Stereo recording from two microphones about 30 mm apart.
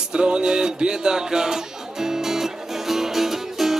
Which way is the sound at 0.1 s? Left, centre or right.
Right.